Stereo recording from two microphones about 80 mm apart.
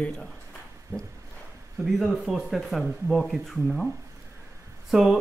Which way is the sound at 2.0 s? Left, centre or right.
Centre.